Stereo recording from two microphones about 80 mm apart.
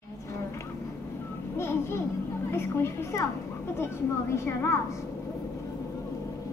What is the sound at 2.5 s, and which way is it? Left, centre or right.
Speech, left.